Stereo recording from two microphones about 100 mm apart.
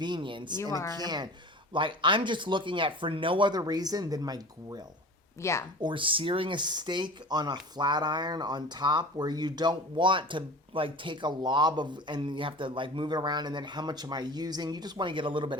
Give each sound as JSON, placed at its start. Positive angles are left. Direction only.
{"t": 0.0, "sound": "speech", "side_deg": -55}
{"t": 0.6, "sound": "speech", "side_deg": 30}
{"t": 0.9, "sound": "speech", "side_deg": -45}
{"t": 1.7, "sound": "speech", "side_deg": -55}
{"t": 5.4, "sound": "speech", "side_deg": 30}
{"t": 5.8, "sound": "speech", "side_deg": -60}